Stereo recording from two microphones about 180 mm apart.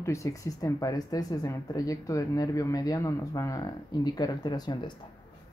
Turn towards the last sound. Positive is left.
turn(degrees=25)  # may be behind; listen again after turning